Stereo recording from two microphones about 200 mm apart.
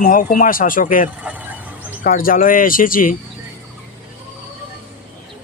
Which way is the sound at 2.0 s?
45° left (ahead or behind).